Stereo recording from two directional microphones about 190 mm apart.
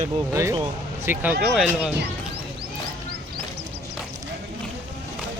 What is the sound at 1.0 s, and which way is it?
Speech, 5° right (ahead or behind).